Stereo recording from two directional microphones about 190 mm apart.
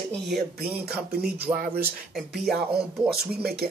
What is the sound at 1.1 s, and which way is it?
Speech, 55° right (ahead or behind).